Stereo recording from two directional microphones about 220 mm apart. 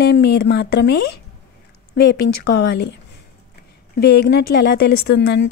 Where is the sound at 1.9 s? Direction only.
50° left (ahead or behind).